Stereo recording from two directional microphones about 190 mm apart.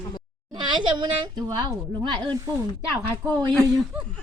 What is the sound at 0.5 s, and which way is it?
A woman's voice, 25° right (ahead or behind).